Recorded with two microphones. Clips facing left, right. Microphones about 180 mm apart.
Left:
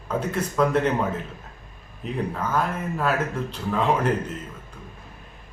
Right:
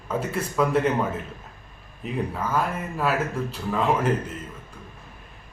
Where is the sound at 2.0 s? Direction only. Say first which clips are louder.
Even; 5° right (ahead or behind).